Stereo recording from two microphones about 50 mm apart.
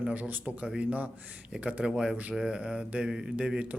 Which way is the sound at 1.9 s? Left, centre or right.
Centre.